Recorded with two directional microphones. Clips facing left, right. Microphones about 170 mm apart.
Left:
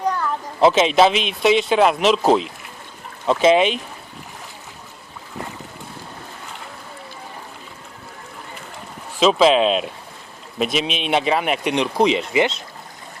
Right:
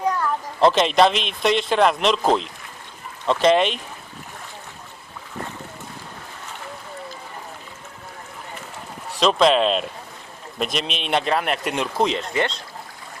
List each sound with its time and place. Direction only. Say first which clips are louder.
0.6 s speech: left 2 dB; 5° left (ahead or behind)
9.1 s speech: left 2 dB; 5° left (ahead or behind)